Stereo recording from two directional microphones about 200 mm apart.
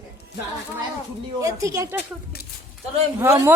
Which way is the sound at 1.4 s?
15° right (ahead or behind).